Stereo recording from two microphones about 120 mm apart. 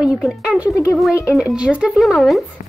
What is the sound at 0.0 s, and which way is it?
A woman's voice, 5° right (ahead or behind).